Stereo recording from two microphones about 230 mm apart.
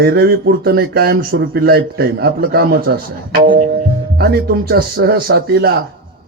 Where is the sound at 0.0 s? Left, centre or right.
Right.